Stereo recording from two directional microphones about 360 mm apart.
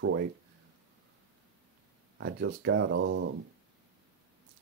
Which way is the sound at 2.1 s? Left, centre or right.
Right.